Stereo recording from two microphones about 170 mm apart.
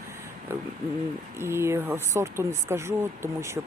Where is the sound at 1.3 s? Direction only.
15° right (ahead or behind).